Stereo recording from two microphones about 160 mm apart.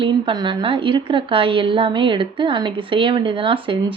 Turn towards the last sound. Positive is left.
turn(degrees=-30)  # may be behind; listen again after turning